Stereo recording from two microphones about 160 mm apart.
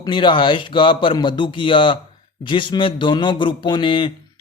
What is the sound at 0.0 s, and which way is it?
A man's voice, 30° left (ahead or behind).